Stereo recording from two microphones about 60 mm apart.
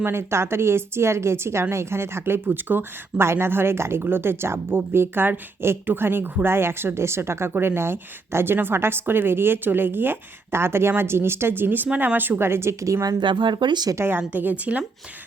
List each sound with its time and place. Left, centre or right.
0.0 s speech: right
12.8 s speech: right
13.9 s speech: right
14.2 s a woman's voice: right